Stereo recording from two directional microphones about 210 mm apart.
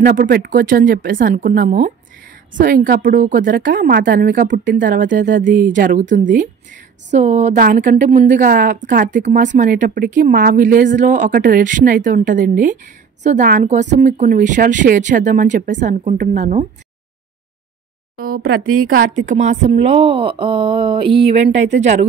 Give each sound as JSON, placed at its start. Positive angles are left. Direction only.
{"t": 0.0, "sound": "a woman's voice", "side_deg": -40}
{"t": 18.1, "sound": "a woman's voice", "side_deg": -45}